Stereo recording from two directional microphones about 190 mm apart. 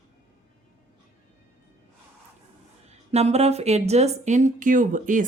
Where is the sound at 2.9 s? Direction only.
35° right (ahead or behind).